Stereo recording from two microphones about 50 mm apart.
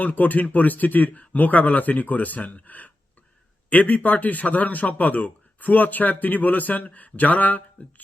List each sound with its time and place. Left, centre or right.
0.0 s a man's voice: left